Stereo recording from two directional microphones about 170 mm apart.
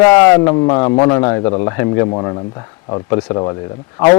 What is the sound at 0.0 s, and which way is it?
Speech, 20° left (ahead or behind).